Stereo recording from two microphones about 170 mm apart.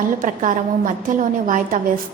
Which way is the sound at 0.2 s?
50° right (ahead or behind).